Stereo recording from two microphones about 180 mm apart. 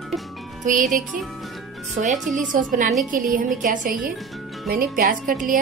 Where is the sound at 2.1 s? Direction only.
Centre (ahead or behind).